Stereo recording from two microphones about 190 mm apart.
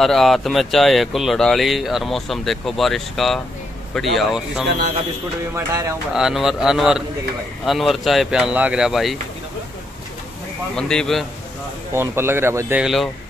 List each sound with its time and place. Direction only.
0.0 s speech: centre (ahead or behind)
5.7 s speech: 15° right (ahead or behind)
6.1 s speech: 5° right (ahead or behind)
10.8 s speech: 5° left (ahead or behind)
11.9 s speech: 10° right (ahead or behind)
12.8 s speech: centre (ahead or behind)